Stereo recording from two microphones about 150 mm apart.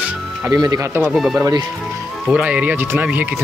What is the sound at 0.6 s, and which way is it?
Speech, 20° right (ahead or behind).